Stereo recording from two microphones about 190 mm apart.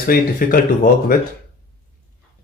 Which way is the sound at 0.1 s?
50° left (ahead or behind).